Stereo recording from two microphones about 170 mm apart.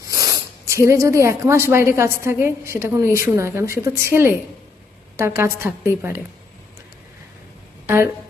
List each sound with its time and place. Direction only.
0.1 s speech: 20° right (ahead or behind)